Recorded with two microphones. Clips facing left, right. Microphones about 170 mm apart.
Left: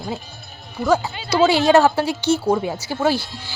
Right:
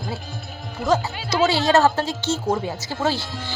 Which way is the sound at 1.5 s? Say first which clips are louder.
Left 3 dB; 15° left (ahead or behind).